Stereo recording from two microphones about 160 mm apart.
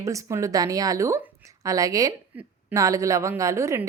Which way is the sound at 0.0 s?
20° right (ahead or behind).